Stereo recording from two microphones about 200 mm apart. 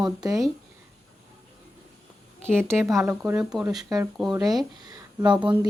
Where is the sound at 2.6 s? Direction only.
10° right (ahead or behind).